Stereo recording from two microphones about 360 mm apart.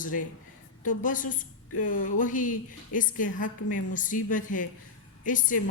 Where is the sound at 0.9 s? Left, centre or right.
Left.